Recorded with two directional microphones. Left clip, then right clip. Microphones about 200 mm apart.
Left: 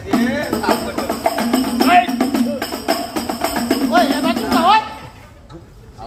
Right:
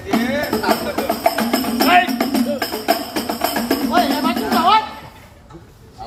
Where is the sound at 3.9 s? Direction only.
40° left (ahead or behind).